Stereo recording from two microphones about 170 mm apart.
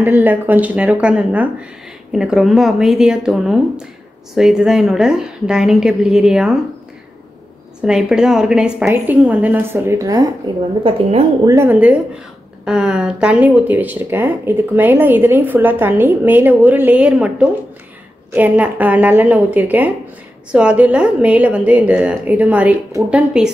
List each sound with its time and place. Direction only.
0.0 s a woman's voice: 10° right (ahead or behind)
7.8 s speech: 5° right (ahead or behind); by 10.2 s 20° right (ahead or behind)
10.8 s a woman's voice: 35° right (ahead or behind)
11.4 s a woman's voice: 15° right (ahead or behind)